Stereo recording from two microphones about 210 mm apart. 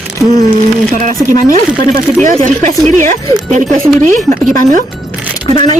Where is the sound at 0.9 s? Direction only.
40° right (ahead or behind).